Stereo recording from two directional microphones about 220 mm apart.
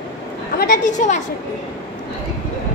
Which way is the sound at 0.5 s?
40° left (ahead or behind).